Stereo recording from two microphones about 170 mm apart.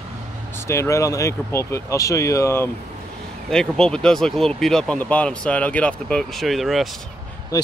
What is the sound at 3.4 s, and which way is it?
Speech, 5° left (ahead or behind).